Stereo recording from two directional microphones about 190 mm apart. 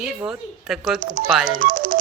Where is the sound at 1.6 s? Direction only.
45° right (ahead or behind).